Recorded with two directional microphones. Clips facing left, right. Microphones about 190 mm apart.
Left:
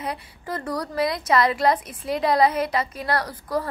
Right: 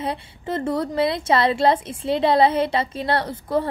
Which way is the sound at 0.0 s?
25° right (ahead or behind).